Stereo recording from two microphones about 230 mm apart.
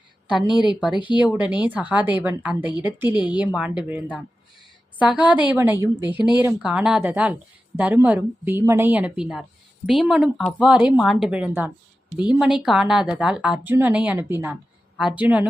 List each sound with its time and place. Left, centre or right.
0.4 s a woman's voice: centre
1.2 s a woman's voice: centre